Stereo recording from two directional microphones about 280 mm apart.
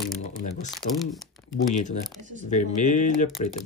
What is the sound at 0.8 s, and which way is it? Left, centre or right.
Speech, left.